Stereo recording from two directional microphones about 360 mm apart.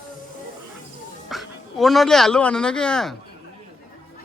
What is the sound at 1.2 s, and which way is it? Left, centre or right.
Speech, centre.